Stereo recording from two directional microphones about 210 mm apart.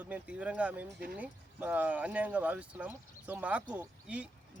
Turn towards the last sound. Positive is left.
turn(degrees=-5)  # may be behind; listen again after turning